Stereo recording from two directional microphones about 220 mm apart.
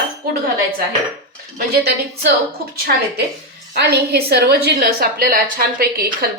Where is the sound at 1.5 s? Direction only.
45° right (ahead or behind).